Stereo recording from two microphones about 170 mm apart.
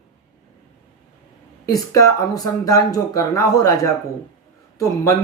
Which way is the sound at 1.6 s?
20° left (ahead or behind).